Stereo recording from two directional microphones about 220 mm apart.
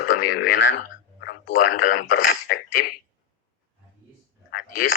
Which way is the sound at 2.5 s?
45° left (ahead or behind).